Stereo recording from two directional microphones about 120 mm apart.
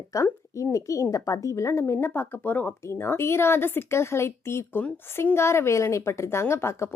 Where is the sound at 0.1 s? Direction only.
25° left (ahead or behind).